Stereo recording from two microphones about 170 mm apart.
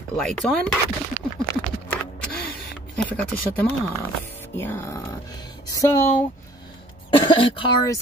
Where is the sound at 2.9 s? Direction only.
5° left (ahead or behind).